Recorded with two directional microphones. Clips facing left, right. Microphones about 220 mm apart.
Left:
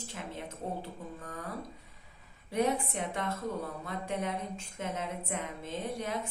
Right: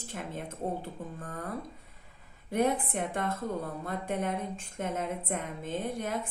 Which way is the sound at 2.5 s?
50° right (ahead or behind).